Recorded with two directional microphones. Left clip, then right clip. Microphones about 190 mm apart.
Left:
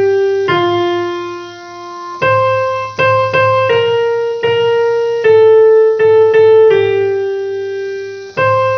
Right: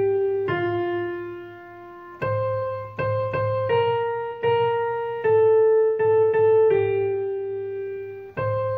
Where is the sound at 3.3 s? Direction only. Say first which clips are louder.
Left 12 dB; 40° right (ahead or behind).